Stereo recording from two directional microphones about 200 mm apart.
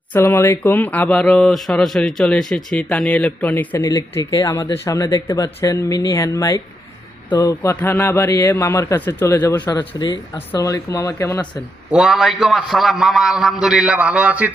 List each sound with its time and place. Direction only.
0.1 s speech: 10° left (ahead or behind)
11.9 s a man's voice: 5° right (ahead or behind)